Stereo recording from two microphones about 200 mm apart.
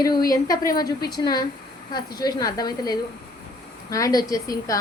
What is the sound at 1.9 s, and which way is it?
A woman's voice, 20° left (ahead or behind).